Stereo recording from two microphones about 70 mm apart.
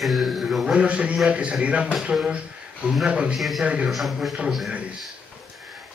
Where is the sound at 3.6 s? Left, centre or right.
Centre.